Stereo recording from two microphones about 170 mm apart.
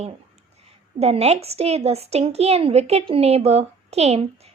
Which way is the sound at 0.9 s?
35° right (ahead or behind).